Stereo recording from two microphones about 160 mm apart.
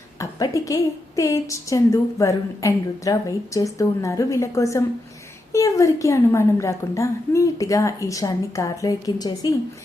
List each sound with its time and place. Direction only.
0.2 s a woman's voice: 20° left (ahead or behind)